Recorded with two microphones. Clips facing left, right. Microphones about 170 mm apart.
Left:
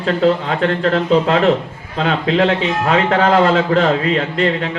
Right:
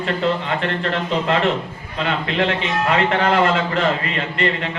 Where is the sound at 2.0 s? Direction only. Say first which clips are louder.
Left 6 dB; 90° left.